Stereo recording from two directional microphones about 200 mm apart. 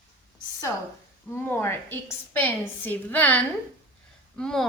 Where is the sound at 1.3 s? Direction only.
10° left (ahead or behind).